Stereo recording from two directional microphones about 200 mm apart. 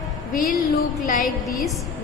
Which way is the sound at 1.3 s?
Centre (ahead or behind).